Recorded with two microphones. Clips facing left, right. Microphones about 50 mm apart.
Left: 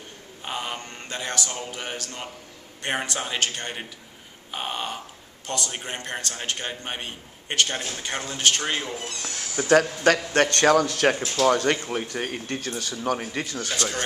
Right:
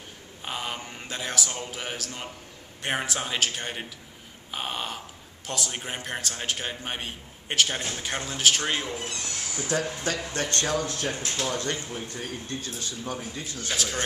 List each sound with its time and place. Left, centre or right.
0.5 s mantra: centre
1.7 s a man's voice: centre
9.6 s speech: left
13.7 s a man's voice: centre